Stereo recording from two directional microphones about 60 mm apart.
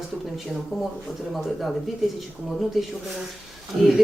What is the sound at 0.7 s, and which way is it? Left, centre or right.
Speech, centre.